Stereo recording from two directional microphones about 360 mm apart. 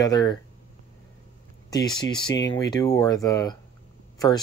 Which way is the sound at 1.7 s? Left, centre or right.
Centre.